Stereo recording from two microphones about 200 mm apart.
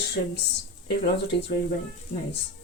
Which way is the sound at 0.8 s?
60° left (ahead or behind).